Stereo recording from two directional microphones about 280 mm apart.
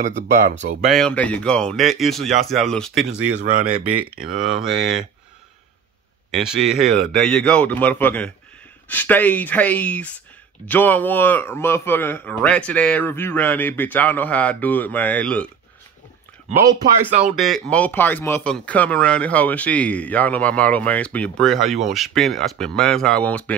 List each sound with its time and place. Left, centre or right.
0.0 s speech: right
0.8 s speech: centre
4.4 s speech: centre
6.3 s a man's voice: centre
17.2 s speech: centre